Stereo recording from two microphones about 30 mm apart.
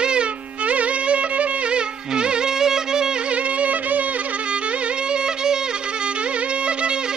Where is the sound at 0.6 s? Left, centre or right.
Right.